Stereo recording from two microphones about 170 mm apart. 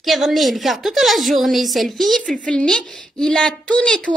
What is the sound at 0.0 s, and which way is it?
Speech, centre (ahead or behind).